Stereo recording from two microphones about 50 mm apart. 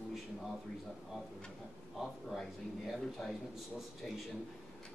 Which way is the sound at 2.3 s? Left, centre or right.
Centre.